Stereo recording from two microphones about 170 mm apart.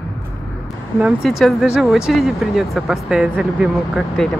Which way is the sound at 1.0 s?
5° right (ahead or behind).